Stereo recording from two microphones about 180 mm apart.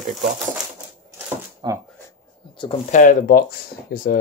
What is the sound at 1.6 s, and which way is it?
Speech, 25° right (ahead or behind).